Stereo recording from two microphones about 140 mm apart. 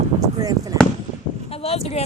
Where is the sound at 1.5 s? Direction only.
45° left (ahead or behind).